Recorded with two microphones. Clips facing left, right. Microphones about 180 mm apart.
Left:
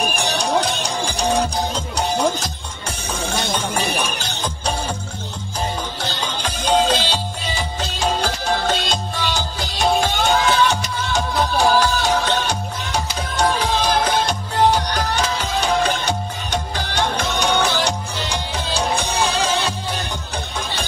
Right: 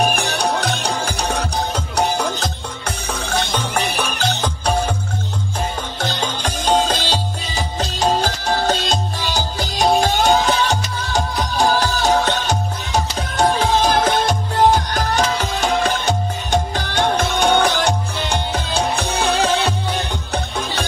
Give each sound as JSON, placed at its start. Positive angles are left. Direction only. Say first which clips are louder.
{"t": 0.1, "sound": "music", "louder": "even", "side_deg": -60}
{"t": 3.3, "sound": "music", "louder": "right 1 dB", "side_deg": -60}
{"t": 6.4, "sound": "music", "louder": "even", "side_deg": -45}